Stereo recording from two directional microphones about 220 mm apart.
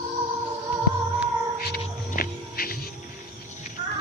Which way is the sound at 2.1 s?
40° left (ahead or behind).